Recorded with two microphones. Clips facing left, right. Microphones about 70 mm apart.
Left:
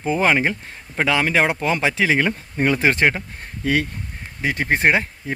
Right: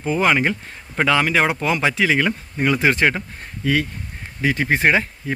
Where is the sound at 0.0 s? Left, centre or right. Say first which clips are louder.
Even; left.